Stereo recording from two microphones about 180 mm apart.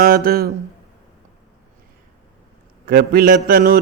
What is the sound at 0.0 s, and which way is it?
Mantra, 55° right (ahead or behind).